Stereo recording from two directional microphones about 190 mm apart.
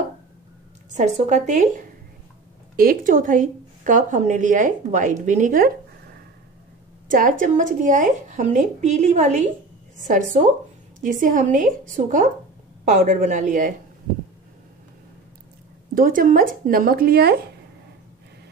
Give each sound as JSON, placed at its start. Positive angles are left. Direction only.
{"t": 0.9, "sound": "a woman's voice", "side_deg": -35}
{"t": 7.1, "sound": "speech", "side_deg": -45}
{"t": 15.9, "sound": "a woman's voice", "side_deg": -45}